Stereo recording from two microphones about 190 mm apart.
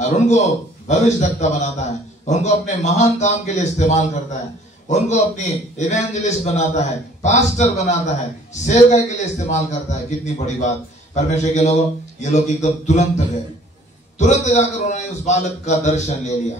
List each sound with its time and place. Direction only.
0.0 s a man's voice: 40° left (ahead or behind)
14.1 s a man's voice: 35° left (ahead or behind)